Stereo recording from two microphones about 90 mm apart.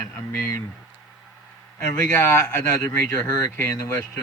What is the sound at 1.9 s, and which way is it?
Speech, 15° left (ahead or behind).